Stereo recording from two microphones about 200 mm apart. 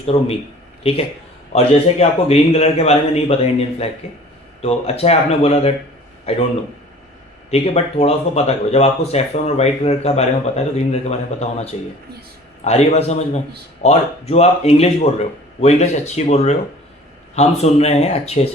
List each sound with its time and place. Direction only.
0.1 s speech: 30° left (ahead or behind)
7.5 s speech: 30° left (ahead or behind)